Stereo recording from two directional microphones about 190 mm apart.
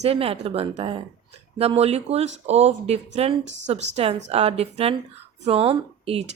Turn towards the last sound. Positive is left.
turn(degrees=-30)  # may be behind; listen again after turning